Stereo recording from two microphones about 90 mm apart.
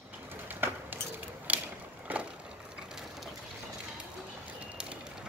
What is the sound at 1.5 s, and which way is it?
Mechanisms, 15° right (ahead or behind).